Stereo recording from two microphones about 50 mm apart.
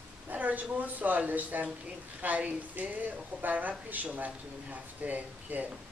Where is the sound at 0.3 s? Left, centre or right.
Right.